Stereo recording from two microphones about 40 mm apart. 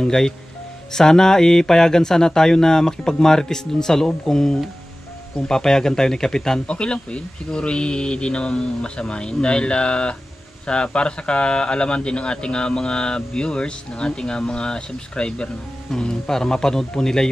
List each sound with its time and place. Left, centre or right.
0.0 s speech: centre